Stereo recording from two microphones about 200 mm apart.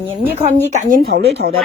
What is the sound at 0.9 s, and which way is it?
Speech, 50° right (ahead or behind).